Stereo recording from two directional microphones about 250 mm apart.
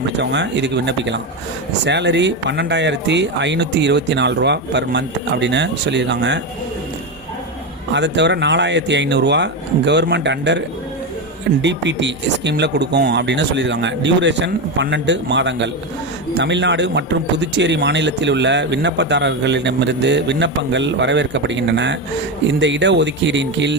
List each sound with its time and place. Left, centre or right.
0.2 s speech: right
7.9 s speech: right
11.6 s speech: right